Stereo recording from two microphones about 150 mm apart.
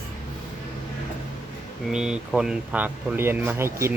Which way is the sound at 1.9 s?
5° right (ahead or behind).